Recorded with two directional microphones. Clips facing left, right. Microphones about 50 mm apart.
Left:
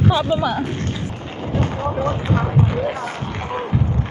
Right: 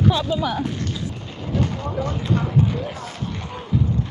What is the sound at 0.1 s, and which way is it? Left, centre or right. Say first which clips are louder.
Speech: left 3 dB; left.